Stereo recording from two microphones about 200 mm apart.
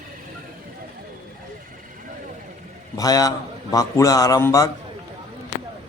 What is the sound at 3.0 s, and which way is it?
A man's voice, 20° left (ahead or behind).